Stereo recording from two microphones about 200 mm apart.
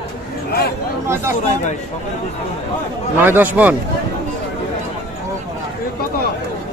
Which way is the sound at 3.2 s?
10° right (ahead or behind).